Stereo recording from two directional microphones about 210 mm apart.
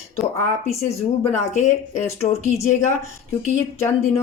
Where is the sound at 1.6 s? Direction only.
35° left (ahead or behind).